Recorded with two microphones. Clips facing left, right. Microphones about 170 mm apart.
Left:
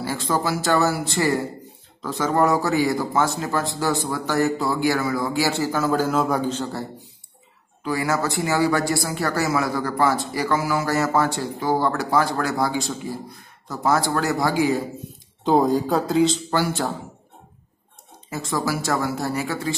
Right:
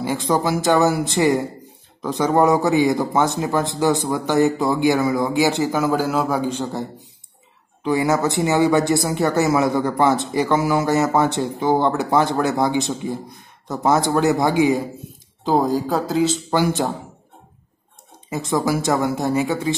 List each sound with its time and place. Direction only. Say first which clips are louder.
0.0 s speech: right 4 dB; 20° right (ahead or behind)
15.4 s speech: even; centre (ahead or behind); by 16.9 s 20° right (ahead or behind)
18.3 s speech: right 4 dB; 20° right (ahead or behind)